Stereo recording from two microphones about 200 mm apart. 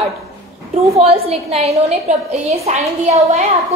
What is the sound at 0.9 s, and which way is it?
A woman's voice, 30° right (ahead or behind).